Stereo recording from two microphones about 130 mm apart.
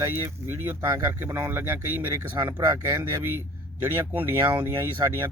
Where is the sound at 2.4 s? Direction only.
30° right (ahead or behind).